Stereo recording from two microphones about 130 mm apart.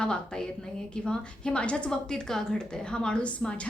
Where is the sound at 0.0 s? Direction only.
5° left (ahead or behind).